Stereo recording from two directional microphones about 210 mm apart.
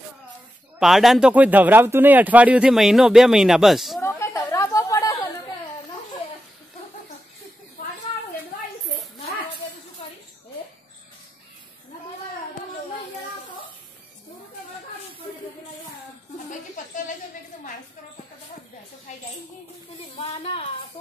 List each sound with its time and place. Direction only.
0.7 s speech: centre (ahead or behind)
4.0 s chatter: 15° left (ahead or behind)
20.2 s a sound: 25° left (ahead or behind)